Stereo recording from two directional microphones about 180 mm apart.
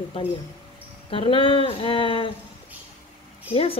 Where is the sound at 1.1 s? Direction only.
30° left (ahead or behind).